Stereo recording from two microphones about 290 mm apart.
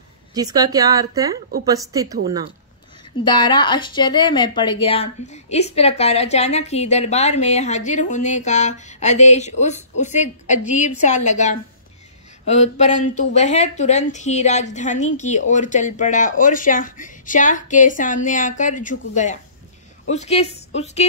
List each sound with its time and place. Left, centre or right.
0.3 s speech: centre
3.3 s speech: centre